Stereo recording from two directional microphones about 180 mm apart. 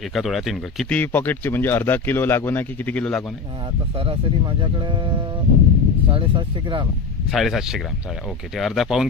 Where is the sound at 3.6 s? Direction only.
30° right (ahead or behind).